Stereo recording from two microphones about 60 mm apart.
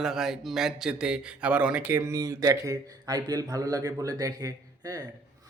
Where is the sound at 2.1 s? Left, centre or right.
Right.